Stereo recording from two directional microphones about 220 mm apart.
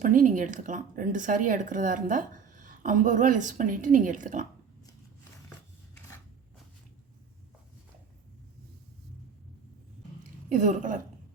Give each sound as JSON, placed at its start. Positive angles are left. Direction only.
{"t": 0.0, "sound": "speech", "side_deg": -35}
{"t": 10.5, "sound": "speech", "side_deg": -35}